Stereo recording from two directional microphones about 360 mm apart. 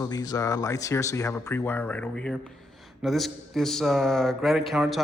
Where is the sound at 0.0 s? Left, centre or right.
Centre.